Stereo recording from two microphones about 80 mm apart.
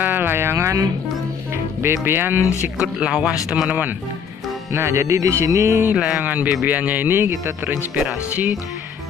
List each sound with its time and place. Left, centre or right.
0.0 s a sound: right
1.8 s speech: right
2.6 s speech: centre
4.7 s music: right
5.9 s speech: centre